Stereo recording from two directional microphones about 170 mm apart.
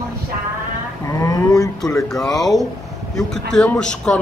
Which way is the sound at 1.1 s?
20° left (ahead or behind).